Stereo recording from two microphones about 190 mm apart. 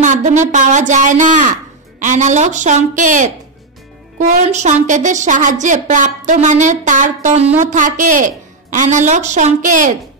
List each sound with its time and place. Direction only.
0.0 s a woman's voice: 40° right (ahead or behind)
4.3 s a woman's voice: 35° right (ahead or behind)